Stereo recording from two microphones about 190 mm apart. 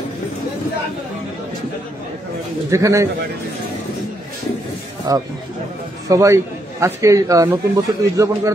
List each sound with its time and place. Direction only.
2.7 s a man's voice: 15° right (ahead or behind)
5.1 s a man's voice: 20° right (ahead or behind)